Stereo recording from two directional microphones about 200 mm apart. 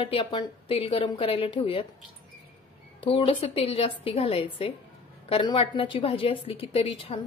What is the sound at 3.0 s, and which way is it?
A woman's voice, 25° left (ahead or behind).